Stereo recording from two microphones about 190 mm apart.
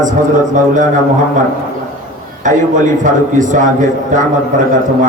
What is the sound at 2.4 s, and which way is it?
A man's voice, 40° right (ahead or behind).